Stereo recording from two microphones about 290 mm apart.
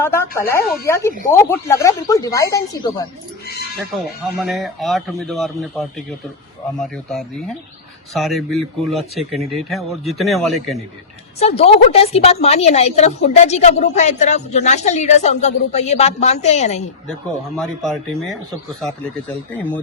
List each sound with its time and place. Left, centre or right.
0.0 s speech: centre
3.8 s speech: centre
11.3 s a woman's voice: left
17.6 s speech: centre